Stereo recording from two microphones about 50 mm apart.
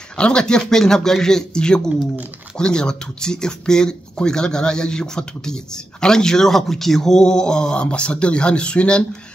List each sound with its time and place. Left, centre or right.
0.2 s speech: centre